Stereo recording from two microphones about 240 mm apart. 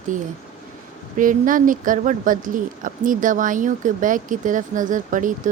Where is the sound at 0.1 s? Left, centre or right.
Right.